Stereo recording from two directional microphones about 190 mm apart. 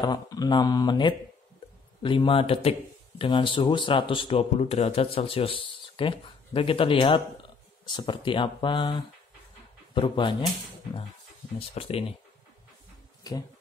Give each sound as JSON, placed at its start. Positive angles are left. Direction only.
{"t": 0.0, "sound": "speech", "side_deg": 20}
{"t": 11.7, "sound": "speech", "side_deg": 30}
{"t": 13.2, "sound": "speech", "side_deg": 20}